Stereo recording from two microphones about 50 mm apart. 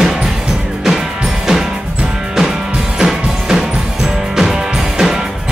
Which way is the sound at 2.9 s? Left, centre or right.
Centre.